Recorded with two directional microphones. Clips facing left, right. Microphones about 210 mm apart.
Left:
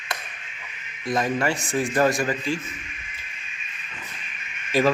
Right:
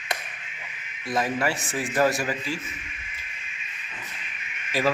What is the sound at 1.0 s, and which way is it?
A man's voice, 5° right (ahead or behind).